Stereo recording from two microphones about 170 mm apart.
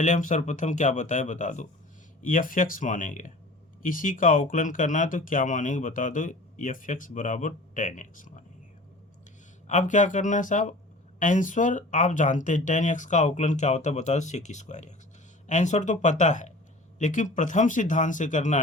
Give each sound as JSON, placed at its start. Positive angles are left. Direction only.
{"t": 0.0, "sound": "speech", "side_deg": 45}
{"t": 9.6, "sound": "speech", "side_deg": 45}